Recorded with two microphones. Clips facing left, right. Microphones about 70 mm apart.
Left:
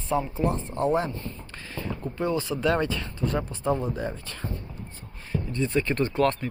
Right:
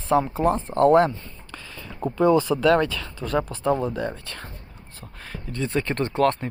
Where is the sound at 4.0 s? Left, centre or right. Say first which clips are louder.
Right 3 dB; right.